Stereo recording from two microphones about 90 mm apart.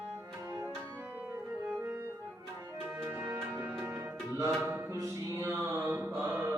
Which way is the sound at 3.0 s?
25° right (ahead or behind).